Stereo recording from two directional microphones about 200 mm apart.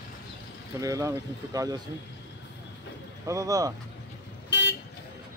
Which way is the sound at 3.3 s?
15° right (ahead or behind).